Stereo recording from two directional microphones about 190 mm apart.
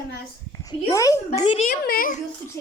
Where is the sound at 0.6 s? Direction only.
20° left (ahead or behind).